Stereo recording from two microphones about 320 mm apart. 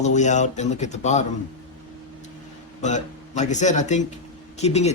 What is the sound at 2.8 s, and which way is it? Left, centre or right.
Speech, left.